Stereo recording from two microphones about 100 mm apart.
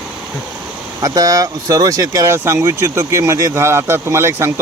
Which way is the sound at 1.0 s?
35° right (ahead or behind).